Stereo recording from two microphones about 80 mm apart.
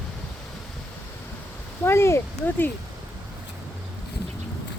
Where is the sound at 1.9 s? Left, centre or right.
Left.